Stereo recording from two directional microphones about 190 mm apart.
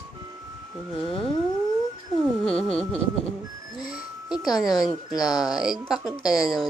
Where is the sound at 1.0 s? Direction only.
30° left (ahead or behind).